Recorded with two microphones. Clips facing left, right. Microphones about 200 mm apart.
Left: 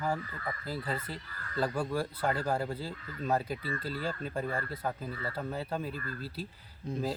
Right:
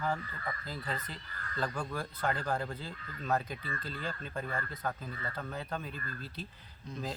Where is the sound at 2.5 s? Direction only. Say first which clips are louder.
Left 3 dB; 30° left (ahead or behind).